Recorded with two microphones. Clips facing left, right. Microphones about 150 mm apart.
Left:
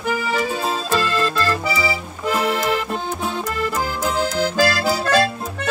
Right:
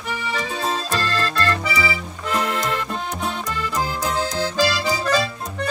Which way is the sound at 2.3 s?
5° left (ahead or behind).